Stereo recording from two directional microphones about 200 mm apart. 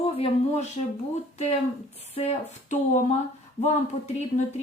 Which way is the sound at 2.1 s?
35° left (ahead or behind).